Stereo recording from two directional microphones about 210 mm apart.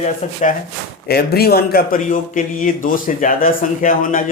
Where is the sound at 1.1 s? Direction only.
50° left (ahead or behind).